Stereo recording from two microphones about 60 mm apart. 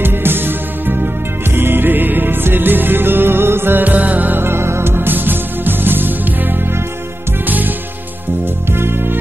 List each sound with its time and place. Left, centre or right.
0.0 s music: right
8.7 s music: right